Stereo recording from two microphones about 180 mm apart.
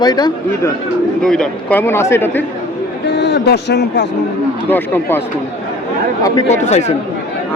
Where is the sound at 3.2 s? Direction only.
75° left (ahead or behind).